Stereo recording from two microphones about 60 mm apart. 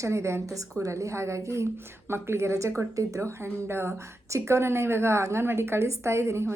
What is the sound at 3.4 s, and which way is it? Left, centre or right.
A woman's voice, right.